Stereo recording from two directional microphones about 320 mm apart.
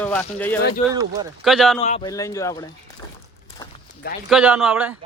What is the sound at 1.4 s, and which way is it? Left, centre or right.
Speech, centre.